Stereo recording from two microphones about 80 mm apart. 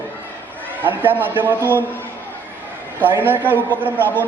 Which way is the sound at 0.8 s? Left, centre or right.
Right.